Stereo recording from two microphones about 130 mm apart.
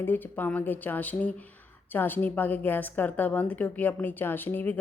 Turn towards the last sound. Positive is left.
turn(degrees=15)  # may be behind; listen again after turning